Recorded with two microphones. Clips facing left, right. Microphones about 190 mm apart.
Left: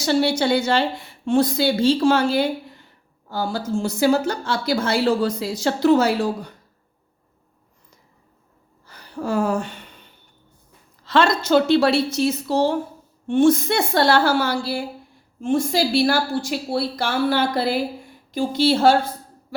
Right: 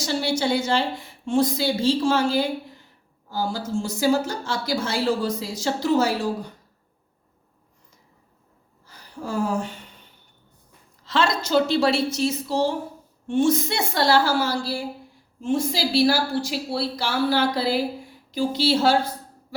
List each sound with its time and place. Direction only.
0.0 s a woman's voice: 65° left (ahead or behind)
8.9 s speech: 65° left (ahead or behind)
11.0 s a woman's voice: 60° left (ahead or behind)